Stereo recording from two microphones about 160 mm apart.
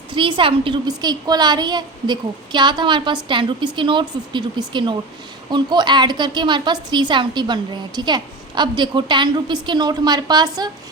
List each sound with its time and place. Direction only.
0.1 s a woman's voice: 30° right (ahead or behind)